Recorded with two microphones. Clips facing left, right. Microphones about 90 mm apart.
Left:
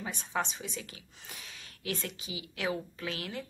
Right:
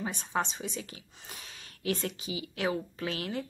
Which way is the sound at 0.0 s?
30° right (ahead or behind).